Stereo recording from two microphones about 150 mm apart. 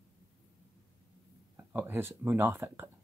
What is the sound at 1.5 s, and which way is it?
Speech, 15° right (ahead or behind).